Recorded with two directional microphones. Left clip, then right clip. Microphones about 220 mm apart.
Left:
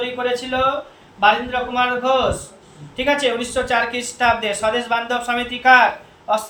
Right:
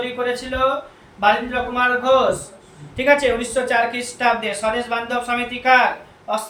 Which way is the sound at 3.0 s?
Centre (ahead or behind).